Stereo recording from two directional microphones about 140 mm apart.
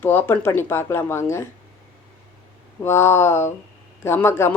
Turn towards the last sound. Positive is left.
turn(degrees=15)  # may be behind; listen again after turning